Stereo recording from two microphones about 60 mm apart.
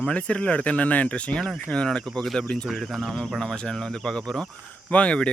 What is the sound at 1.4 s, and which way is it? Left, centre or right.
Speech, centre.